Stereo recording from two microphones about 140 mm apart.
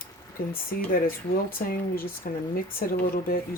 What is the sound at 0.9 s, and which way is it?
Speech, 90° left.